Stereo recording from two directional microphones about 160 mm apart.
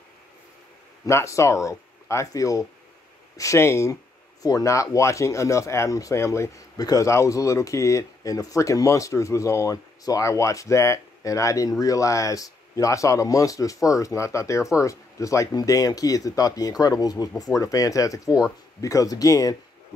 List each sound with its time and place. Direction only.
1.0 s speech: 20° left (ahead or behind)